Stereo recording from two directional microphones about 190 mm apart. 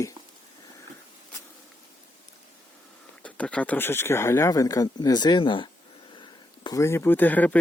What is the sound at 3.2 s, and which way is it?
Speech, 5° left (ahead or behind).